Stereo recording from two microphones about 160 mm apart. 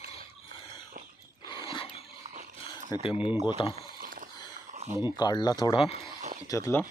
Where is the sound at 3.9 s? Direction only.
60° right (ahead or behind).